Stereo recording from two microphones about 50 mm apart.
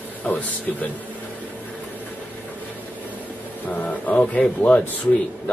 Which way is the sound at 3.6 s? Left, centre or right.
Left.